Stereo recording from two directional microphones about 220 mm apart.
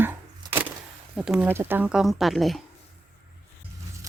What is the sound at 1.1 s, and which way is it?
Speech, centre (ahead or behind).